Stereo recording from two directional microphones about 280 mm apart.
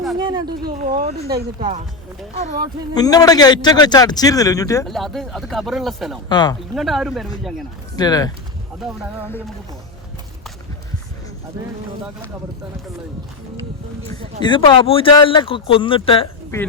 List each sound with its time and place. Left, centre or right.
0.2 s speech: centre
0.6 s speech: right
2.9 s a man's voice: centre
4.9 s speech: centre
6.2 s a man's voice: centre
6.7 s speech: centre
7.9 s a man's voice: centre
8.8 s speech: centre
14.4 s speech: centre